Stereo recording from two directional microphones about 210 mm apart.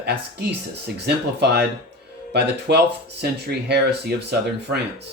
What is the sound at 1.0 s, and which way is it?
Speech, 50° right (ahead or behind).